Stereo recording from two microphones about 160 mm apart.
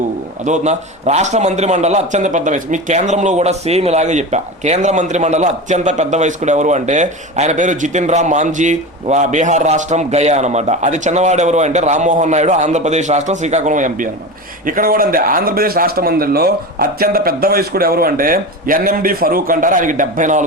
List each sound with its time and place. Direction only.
0.4 s a man's voice: 45° right (ahead or behind)